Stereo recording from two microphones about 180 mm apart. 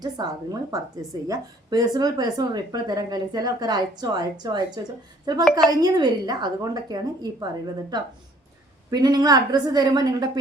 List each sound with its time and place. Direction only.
0.2 s speech: 25° right (ahead or behind)